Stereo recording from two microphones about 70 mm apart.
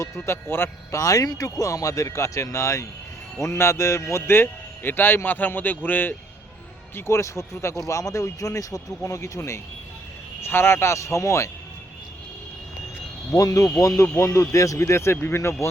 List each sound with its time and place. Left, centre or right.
0.3 s a man's voice: left
0.9 s speech: left
4.3 s a man's voice: left
6.9 s speech: left
13.3 s a man's voice: left